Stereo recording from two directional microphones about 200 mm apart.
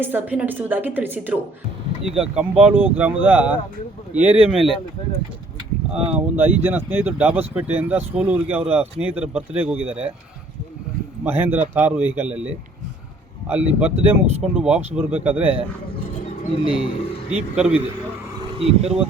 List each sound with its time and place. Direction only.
0.0 s speech: 10° right (ahead or behind)
5.9 s speech: 5° right (ahead or behind)
11.2 s speech: 10° right (ahead or behind)
16.6 s speech: 25° left (ahead or behind)
17.6 s speech: 5° right (ahead or behind)
18.5 s speech: 30° right (ahead or behind)